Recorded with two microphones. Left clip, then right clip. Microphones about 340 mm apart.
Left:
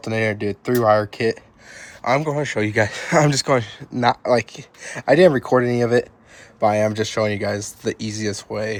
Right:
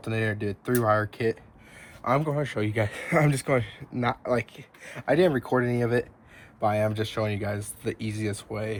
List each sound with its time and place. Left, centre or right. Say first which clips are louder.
0.0 s speech: left 8 dB; left